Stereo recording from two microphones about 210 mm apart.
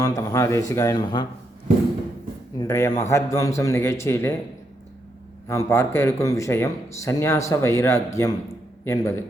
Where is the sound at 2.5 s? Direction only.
15° left (ahead or behind).